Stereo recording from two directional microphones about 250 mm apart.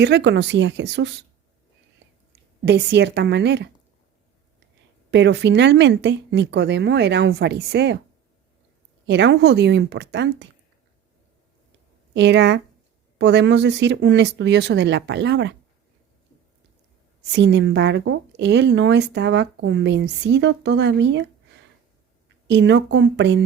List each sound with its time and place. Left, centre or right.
0.0 s speech: right
2.0 s whispering: right
2.6 s speech: right
5.1 s speech: right
9.0 s speech: right
12.1 s speech: right
17.3 s speech: right
22.4 s speech: right